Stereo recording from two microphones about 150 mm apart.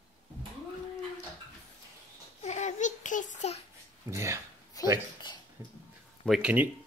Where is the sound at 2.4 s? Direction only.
50° left (ahead or behind).